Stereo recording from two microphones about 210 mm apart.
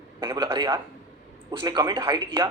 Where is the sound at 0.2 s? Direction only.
20° right (ahead or behind).